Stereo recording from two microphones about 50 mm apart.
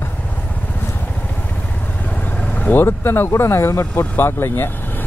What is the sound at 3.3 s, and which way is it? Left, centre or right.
Speech, left.